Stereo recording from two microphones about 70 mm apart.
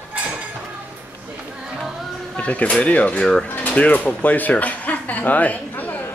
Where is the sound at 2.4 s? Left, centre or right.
Centre.